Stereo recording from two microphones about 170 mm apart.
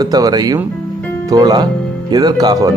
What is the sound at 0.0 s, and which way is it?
Speech, 25° right (ahead or behind).